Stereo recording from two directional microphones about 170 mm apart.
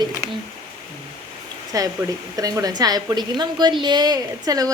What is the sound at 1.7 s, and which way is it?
A woman's voice, 20° right (ahead or behind).